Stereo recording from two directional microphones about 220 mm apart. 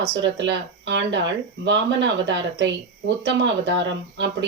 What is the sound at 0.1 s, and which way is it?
Speech, 50° right (ahead or behind).